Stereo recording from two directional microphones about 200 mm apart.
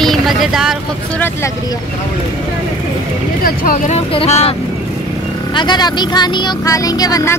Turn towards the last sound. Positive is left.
turn(degrees=15)  # may be behind; listen again after turning